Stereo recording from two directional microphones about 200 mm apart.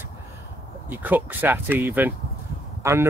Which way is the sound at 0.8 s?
10° right (ahead or behind).